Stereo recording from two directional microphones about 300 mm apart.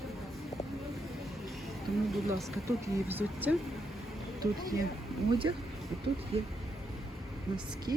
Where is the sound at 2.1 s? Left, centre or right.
Centre.